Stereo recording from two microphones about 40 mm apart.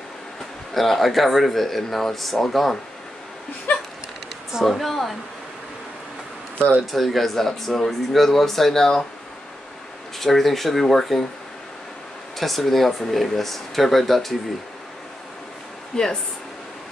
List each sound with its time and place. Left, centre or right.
0.7 s speech: centre
3.7 s a sound: left
4.6 s speech: centre
6.9 s speech: centre
10.2 s speech: centre
12.4 s speech: centre
15.9 s speech: centre